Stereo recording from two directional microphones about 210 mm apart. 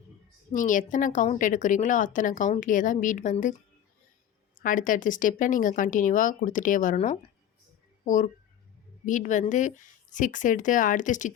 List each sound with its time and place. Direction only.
0.5 s a woman's voice: 40° left (ahead or behind)
4.6 s a woman's voice: 40° left (ahead or behind)